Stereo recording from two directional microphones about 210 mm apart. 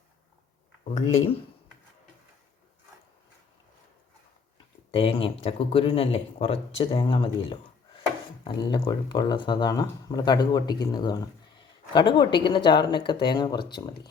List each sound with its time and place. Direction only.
4.9 s speech: 25° left (ahead or behind)